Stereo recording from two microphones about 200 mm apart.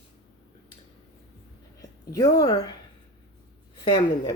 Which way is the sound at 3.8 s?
25° left (ahead or behind).